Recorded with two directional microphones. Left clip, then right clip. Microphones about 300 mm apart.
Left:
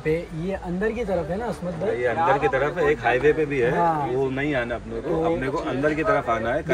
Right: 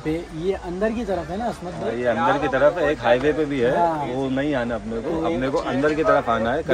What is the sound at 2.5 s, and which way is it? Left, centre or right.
Speech, centre.